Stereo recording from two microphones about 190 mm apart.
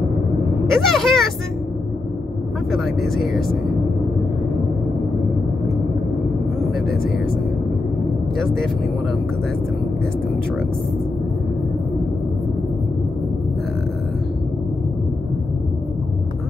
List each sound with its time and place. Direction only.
0.7 s speech: centre (ahead or behind)
2.7 s speech: centre (ahead or behind)